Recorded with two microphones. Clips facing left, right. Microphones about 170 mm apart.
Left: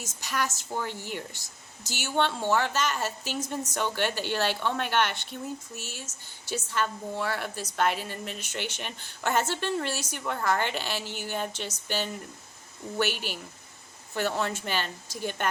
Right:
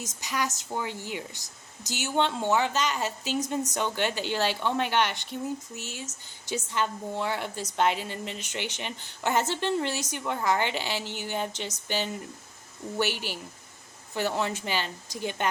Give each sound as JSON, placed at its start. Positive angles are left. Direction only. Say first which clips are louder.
{"t": 0.0, "sound": "a woman's voice", "louder": "even", "side_deg": -15}